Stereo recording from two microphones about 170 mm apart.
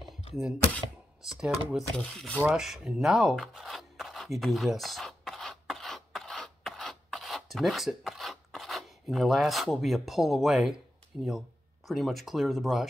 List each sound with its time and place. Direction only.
1.4 s speech: 5° right (ahead or behind)
2.4 s a sound: 5° right (ahead or behind)
11.1 s speech: centre (ahead or behind)